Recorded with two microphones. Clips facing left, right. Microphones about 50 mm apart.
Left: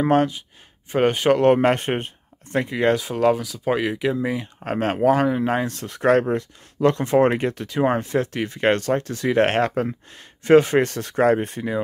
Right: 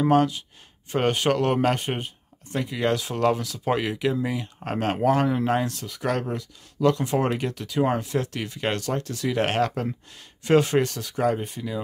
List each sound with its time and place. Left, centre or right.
0.0 s speech: left
0.9 s speech: centre
3.0 s speech: centre
5.7 s speech: left